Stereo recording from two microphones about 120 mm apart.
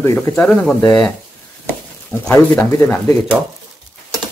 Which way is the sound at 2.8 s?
15° left (ahead or behind).